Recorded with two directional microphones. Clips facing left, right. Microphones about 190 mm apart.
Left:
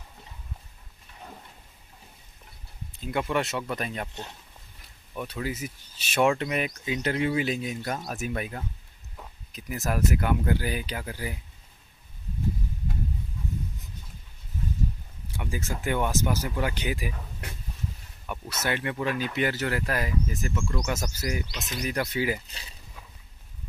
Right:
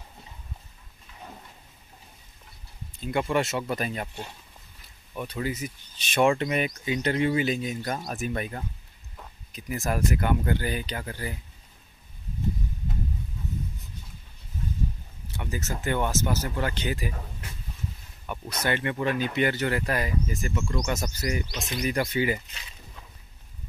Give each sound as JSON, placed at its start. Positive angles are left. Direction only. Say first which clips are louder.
{"t": 3.0, "sound": "speech", "louder": "right 2 dB", "side_deg": 0}
{"t": 15.3, "sound": "speech", "louder": "even", "side_deg": 10}
{"t": 18.2, "sound": "speech", "louder": "right 2 dB", "side_deg": 5}
{"t": 22.5, "sound": "speech", "louder": "left 1 dB", "side_deg": 35}